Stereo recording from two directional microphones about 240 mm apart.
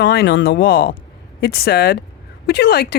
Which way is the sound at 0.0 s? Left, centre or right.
Left.